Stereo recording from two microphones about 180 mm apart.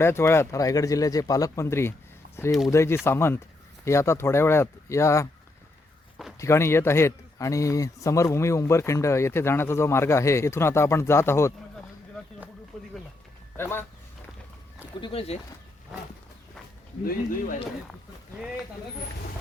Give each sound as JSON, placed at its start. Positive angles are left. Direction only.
{"t": 0.0, "sound": "a man's voice", "side_deg": 15}
{"t": 6.4, "sound": "a man's voice", "side_deg": 15}
{"t": 12.7, "sound": "a sound", "side_deg": 0}
{"t": 13.6, "sound": "a man's voice", "side_deg": 10}
{"t": 15.0, "sound": "speech", "side_deg": 35}